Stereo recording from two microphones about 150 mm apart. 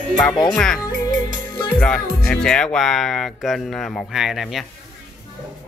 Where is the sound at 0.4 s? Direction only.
5° left (ahead or behind).